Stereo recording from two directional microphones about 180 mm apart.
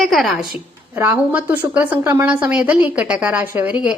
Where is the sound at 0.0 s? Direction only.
Centre (ahead or behind).